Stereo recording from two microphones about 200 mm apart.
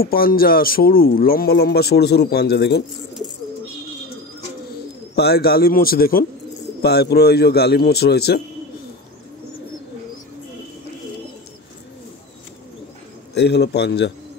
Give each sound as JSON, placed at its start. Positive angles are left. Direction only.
{"t": 0.0, "sound": "speech", "side_deg": 45}
{"t": 5.1, "sound": "speech", "side_deg": 55}
{"t": 13.3, "sound": "a man's voice", "side_deg": 55}